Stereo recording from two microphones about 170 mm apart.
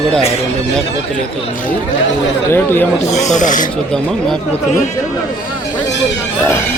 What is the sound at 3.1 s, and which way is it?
Speech, 45° left (ahead or behind).